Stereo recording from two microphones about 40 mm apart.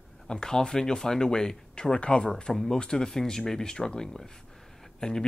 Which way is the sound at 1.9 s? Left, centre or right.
Left.